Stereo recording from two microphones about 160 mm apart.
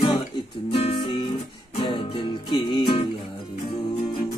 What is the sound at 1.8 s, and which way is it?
Music, 30° left (ahead or behind).